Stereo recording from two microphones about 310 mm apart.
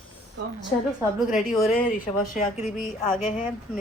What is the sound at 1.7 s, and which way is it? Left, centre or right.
Speech, left.